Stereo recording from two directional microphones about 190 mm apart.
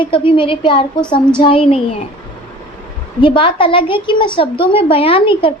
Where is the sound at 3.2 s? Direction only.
25° left (ahead or behind).